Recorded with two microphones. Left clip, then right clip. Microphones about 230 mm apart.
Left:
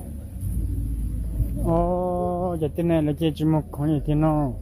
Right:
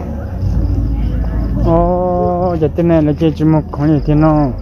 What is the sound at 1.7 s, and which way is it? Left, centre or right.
Speech, left.